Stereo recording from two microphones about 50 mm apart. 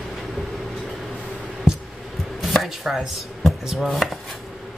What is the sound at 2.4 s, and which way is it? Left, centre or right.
Chopping, centre.